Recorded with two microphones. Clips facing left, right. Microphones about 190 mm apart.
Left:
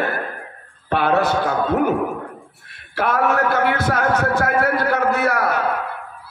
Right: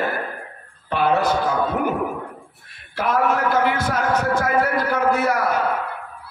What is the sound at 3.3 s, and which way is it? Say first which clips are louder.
A man's voice: left 1 dB; 65° left (ahead or behind).